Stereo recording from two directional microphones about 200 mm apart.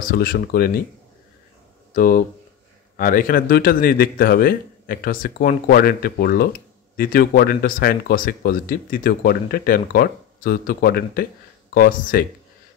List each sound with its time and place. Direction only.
0.1 s speech: 50° left (ahead or behind)
2.0 s speech: 45° left (ahead or behind)